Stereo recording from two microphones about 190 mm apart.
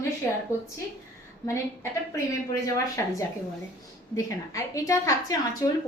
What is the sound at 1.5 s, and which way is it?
A woman's voice, 15° left (ahead or behind).